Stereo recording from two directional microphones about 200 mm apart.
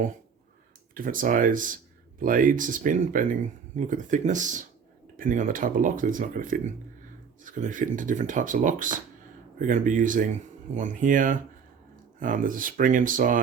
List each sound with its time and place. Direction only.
0.9 s speech: 40° right (ahead or behind)